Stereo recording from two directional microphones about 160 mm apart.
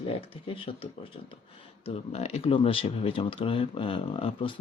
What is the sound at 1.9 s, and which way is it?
Speech, 40° left (ahead or behind).